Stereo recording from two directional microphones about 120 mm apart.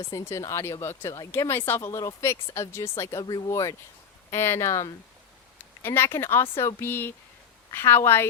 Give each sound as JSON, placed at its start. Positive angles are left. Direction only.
{"t": 0.1, "sound": "a woman's voice", "side_deg": 25}